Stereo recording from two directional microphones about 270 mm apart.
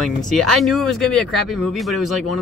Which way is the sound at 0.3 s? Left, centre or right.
Centre.